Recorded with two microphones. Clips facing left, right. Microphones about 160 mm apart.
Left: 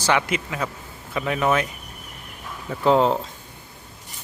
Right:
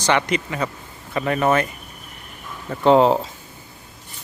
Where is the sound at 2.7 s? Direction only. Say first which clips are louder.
Right 4 dB; centre (ahead or behind).